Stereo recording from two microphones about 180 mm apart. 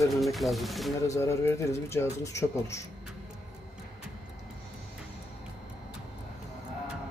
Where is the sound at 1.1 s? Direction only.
15° left (ahead or behind).